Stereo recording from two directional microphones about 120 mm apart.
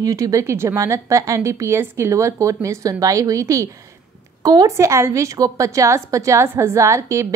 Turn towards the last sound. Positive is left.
turn(degrees=-25)  # may be behind; listen again after turning